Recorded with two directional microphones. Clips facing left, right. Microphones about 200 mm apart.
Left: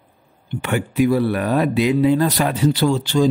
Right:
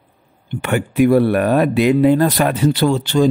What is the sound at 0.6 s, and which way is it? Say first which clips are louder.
Speech: right 3 dB; 55° right (ahead or behind).